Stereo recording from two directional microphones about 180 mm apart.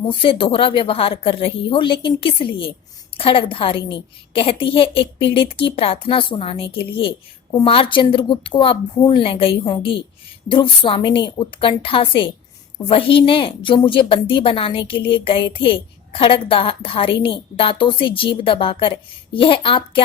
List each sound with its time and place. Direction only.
0.1 s a woman's voice: 30° left (ahead or behind)